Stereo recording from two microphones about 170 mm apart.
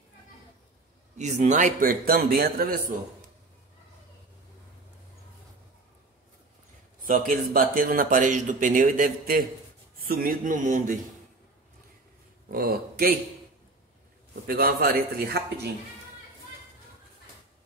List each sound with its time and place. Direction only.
1.1 s a man's voice: 45° right (ahead or behind); by 3.0 s 60° right (ahead or behind)
7.0 s speech: 55° right (ahead or behind)
12.4 s speech: 60° right (ahead or behind)
14.5 s a man's voice: 60° right (ahead or behind)